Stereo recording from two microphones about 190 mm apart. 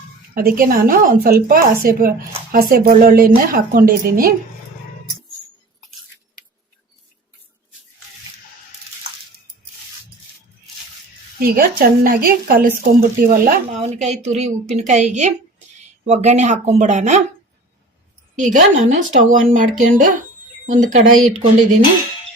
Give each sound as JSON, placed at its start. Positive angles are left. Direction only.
{"t": 0.3, "sound": "speech", "side_deg": -50}
{"t": 11.3, "sound": "speech", "side_deg": -50}
{"t": 13.7, "sound": "a woman's voice", "side_deg": -35}
{"t": 18.3, "sound": "speech", "side_deg": -40}